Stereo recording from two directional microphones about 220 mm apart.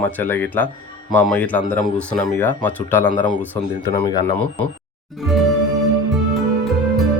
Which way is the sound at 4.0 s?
20° left (ahead or behind).